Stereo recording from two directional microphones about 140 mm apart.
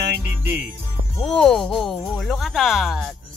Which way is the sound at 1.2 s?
5° left (ahead or behind).